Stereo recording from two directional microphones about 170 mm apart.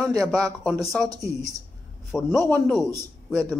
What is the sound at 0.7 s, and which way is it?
Speech, centre (ahead or behind).